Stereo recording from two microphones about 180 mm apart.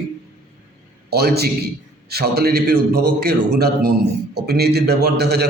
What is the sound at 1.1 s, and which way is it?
A man's voice, 60° right (ahead or behind).